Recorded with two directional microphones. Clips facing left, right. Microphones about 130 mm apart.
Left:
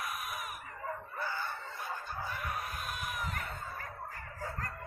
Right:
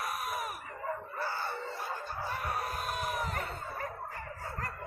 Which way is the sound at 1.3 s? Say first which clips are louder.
Right 3 dB; 45° right (ahead or behind).